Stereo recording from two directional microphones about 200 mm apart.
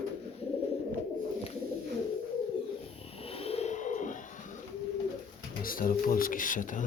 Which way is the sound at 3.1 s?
30° left (ahead or behind).